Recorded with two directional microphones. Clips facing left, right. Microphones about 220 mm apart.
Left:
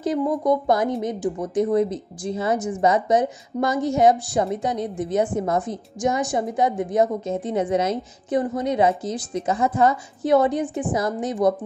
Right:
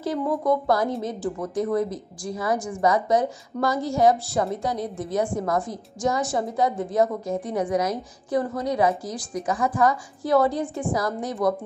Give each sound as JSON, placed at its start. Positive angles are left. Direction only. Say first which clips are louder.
{"t": 0.0, "sound": "a woman's voice", "louder": "left 3 dB", "side_deg": 20}